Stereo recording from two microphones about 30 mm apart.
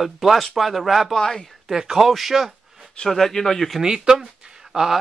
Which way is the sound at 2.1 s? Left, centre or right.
Centre.